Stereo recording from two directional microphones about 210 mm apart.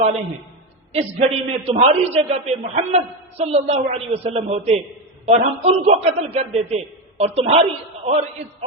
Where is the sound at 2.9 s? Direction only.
30° right (ahead or behind).